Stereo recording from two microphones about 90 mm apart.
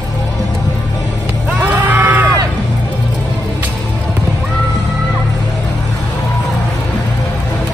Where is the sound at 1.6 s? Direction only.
20° right (ahead or behind).